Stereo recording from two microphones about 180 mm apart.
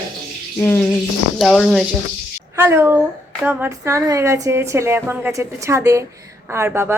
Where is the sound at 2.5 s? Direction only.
15° right (ahead or behind).